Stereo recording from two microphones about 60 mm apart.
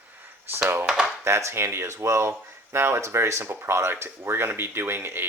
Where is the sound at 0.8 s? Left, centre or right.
Centre.